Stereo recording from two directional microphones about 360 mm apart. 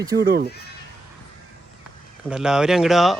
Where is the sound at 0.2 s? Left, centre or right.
Right.